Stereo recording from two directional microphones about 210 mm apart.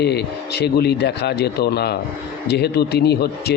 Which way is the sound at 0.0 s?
50° left (ahead or behind).